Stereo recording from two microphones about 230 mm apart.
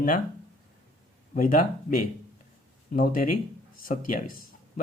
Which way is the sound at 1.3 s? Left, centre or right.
Left.